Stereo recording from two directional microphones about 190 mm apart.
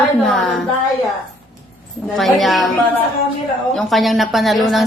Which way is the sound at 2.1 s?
Centre (ahead or behind).